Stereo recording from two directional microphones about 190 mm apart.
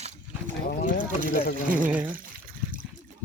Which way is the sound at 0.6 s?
50° left (ahead or behind).